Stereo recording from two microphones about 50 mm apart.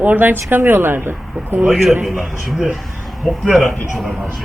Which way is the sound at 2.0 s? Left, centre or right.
Centre.